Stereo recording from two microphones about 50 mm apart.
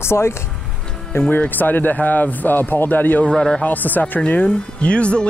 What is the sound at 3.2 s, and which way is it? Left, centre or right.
Speech, centre.